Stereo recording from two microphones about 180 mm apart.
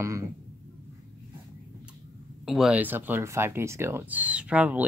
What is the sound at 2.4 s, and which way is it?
Speech, centre (ahead or behind).